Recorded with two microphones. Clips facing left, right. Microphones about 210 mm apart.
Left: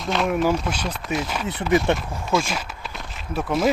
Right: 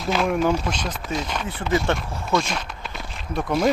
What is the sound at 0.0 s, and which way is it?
Speech, centre (ahead or behind).